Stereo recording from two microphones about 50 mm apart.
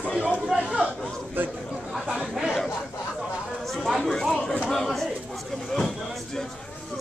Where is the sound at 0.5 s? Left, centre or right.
Centre.